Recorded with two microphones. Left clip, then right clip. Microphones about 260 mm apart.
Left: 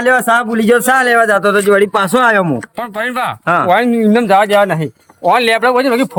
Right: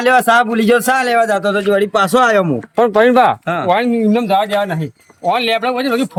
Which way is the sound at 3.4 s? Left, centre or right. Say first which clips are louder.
Left 6 dB; centre.